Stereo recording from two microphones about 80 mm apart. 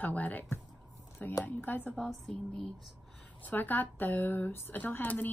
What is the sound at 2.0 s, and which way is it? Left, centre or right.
Speech, centre.